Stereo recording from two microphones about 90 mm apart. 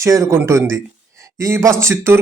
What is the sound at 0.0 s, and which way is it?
A man's voice, 35° right (ahead or behind).